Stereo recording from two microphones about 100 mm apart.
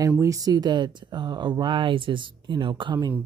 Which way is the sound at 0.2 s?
35° right (ahead or behind).